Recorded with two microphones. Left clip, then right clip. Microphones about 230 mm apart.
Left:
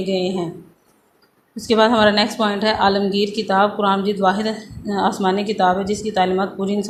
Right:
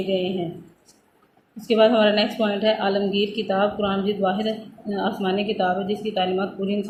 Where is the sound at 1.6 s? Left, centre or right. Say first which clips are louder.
Left 3 dB; centre.